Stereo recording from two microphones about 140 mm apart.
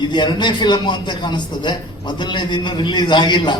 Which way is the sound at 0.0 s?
35° left (ahead or behind).